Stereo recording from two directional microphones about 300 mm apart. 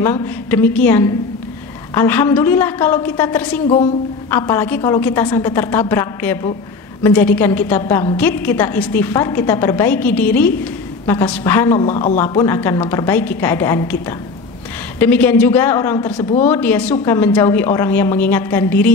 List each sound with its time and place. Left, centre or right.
0.0 s a woman's voice: centre
3.6 s speech: centre
4.3 s a woman's voice: centre
11.9 s speech: left
12.2 s a woman's voice: centre
15.0 s a woman's voice: centre